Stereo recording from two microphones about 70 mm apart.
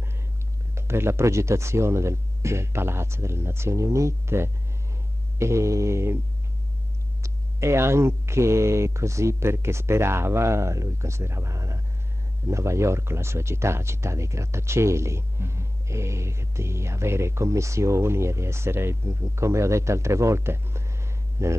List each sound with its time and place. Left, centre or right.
0.7 s speech: right
5.4 s mantra: right
7.2 s speech: right
21.4 s mantra: right